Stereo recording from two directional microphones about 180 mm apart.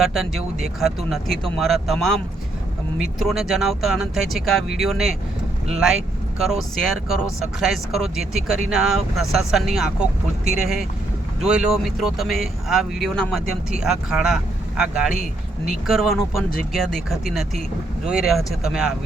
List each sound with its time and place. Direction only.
0.0 s speech: centre (ahead or behind)
3.2 s speech: centre (ahead or behind)